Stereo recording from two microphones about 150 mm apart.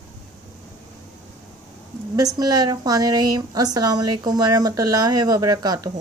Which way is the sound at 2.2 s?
25° right (ahead or behind).